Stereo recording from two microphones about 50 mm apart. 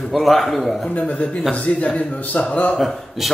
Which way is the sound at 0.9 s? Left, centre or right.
Left.